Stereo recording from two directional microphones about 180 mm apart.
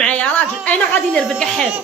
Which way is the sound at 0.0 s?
10° left (ahead or behind).